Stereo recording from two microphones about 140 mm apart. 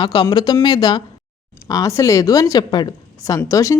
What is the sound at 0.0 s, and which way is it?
A woman's voice, 35° left (ahead or behind).